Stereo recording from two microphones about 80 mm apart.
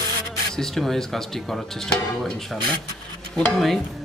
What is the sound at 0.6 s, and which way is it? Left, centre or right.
Speech, centre.